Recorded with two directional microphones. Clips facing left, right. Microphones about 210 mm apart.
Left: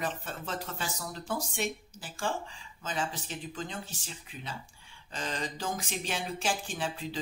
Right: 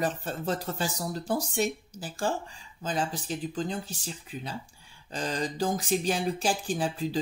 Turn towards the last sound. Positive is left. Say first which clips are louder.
# right 7 dB
turn(degrees=-40)  # may be behind; listen again after turning